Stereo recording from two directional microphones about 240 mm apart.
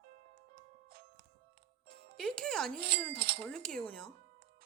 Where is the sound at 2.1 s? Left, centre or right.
Centre.